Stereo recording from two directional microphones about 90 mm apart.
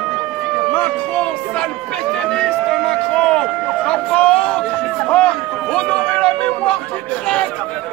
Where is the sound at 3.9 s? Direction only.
10° left (ahead or behind).